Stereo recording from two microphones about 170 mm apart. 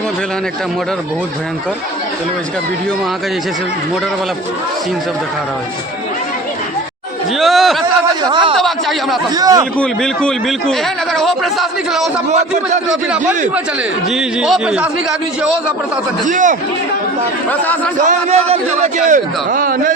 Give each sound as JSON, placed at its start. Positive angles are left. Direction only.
{"t": 7.3, "sound": "a man's voice", "side_deg": 0}
{"t": 8.2, "sound": "a man's voice", "side_deg": -30}
{"t": 8.5, "sound": "a man's voice", "side_deg": 0}
{"t": 9.3, "sound": "a man's voice", "side_deg": -20}
{"t": 9.7, "sound": "a man's voice", "side_deg": 5}
{"t": 16.2, "sound": "a man's voice", "side_deg": -50}
{"t": 17.5, "sound": "speech", "side_deg": 10}
{"t": 18.0, "sound": "a man's voice", "side_deg": -40}